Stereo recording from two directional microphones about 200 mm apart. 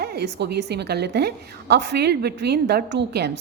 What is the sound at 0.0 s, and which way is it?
A woman's voice, 55° right (ahead or behind).